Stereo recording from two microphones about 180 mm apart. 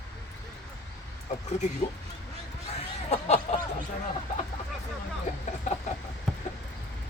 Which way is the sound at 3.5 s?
40° left (ahead or behind).